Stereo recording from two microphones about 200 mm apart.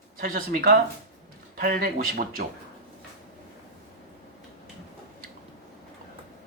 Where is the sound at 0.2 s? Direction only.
45° right (ahead or behind).